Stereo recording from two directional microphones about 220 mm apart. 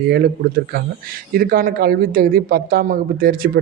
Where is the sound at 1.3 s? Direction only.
40° right (ahead or behind).